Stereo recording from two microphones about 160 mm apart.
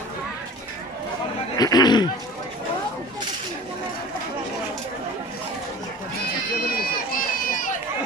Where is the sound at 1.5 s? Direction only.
25° left (ahead or behind).